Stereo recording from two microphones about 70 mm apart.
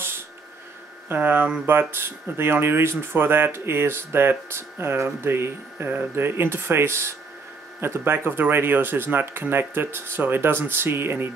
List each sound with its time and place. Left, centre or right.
1.0 s speech: right